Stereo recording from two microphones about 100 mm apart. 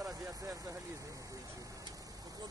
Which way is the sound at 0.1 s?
35° right (ahead or behind).